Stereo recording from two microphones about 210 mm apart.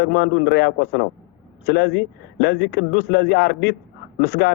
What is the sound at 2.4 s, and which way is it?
A man's voice, 55° left (ahead or behind).